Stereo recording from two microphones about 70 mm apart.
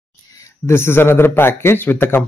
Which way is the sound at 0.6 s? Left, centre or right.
Left.